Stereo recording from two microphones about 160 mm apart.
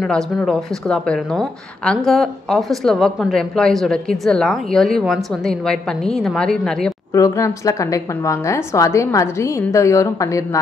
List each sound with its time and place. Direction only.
0.0 s a woman's voice: 5° left (ahead or behind)
7.1 s a woman's voice: 20° left (ahead or behind)